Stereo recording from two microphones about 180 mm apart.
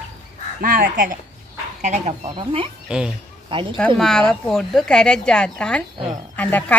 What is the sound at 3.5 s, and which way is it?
Speech, 25° right (ahead or behind).